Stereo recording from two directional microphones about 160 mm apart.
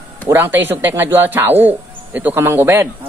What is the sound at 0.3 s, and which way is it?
Speech, 15° right (ahead or behind).